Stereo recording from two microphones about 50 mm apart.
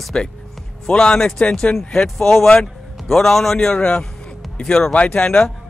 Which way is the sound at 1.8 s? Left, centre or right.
Centre.